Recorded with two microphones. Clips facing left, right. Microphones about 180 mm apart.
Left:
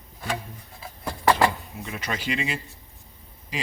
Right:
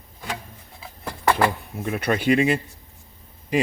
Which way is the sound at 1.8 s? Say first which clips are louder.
Right 10 dB; 55° right (ahead or behind).